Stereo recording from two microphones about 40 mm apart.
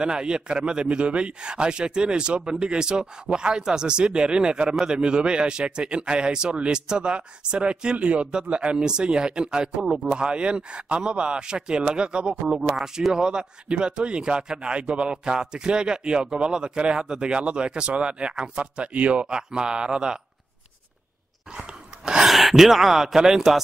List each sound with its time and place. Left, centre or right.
0.0 s speech: right
21.5 s a sound: right
22.3 s speech: centre